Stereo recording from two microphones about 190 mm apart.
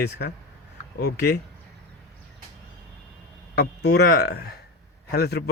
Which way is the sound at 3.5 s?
60° left (ahead or behind).